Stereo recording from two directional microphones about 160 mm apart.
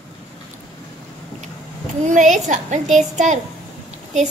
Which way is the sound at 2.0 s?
50° right (ahead or behind).